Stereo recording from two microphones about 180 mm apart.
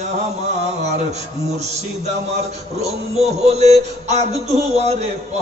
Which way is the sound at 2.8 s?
35° right (ahead or behind).